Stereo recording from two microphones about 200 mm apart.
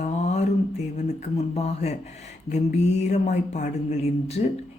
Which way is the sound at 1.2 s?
30° left (ahead or behind).